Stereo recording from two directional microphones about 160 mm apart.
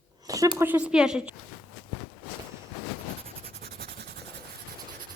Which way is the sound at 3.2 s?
70° right (ahead or behind).